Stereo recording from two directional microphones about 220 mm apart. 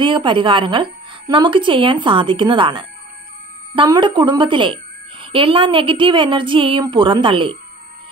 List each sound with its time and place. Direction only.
0.0 s a woman's voice: 20° right (ahead or behind)